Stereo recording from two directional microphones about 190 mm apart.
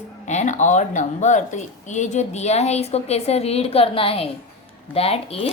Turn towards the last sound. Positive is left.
turn(degrees=30)  # may be behind; listen again after turning